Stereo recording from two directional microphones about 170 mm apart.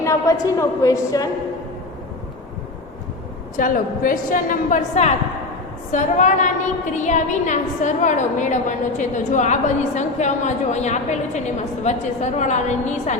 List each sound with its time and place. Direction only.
0.0 s a woman's voice: 20° left (ahead or behind)
3.6 s a woman's voice: 55° left (ahead or behind)